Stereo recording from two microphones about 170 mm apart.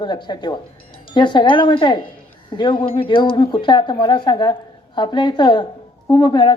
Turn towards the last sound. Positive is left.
turn(degrees=25)  # may be behind; listen again after turning